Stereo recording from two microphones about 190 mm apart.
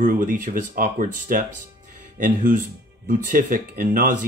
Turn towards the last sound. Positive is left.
turn(degrees=-45)  # may be behind; listen again after turning